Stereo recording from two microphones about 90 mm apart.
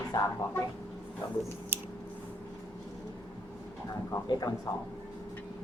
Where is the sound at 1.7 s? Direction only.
25° right (ahead or behind).